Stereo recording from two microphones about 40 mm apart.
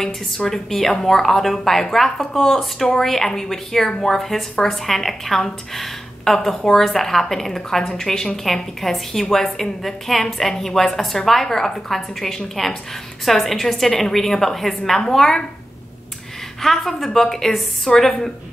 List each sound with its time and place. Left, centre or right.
0.5 s a woman's voice: centre
16.6 s a woman's voice: centre